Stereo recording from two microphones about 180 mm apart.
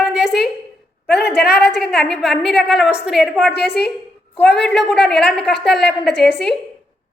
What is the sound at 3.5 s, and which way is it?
Speech, 65° left (ahead or behind).